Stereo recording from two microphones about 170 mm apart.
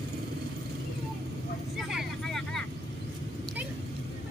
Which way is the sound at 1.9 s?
Centre (ahead or behind).